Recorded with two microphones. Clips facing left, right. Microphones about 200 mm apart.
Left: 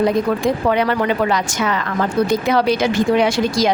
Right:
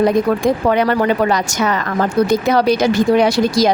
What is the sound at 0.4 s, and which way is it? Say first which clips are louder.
A woman's voice: right 2 dB; 45° right (ahead or behind).